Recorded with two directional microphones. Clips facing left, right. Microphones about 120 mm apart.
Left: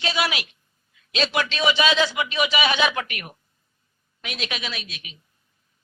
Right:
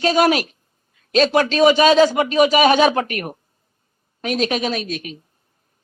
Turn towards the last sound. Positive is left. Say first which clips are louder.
# right 12 dB
turn(degrees=-45)  # may be behind; listen again after turning